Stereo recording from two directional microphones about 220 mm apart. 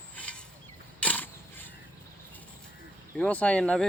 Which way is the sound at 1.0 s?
5° left (ahead or behind).